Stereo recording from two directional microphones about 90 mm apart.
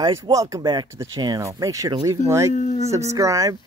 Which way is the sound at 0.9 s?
35° right (ahead or behind).